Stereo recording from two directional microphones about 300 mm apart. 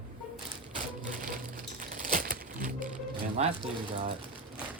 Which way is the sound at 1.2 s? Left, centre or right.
Right.